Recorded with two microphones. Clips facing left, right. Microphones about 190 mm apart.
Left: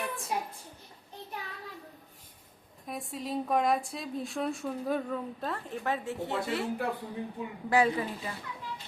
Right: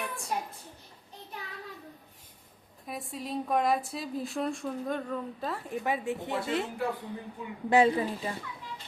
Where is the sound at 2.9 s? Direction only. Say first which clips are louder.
Left 1 dB; centre (ahead or behind).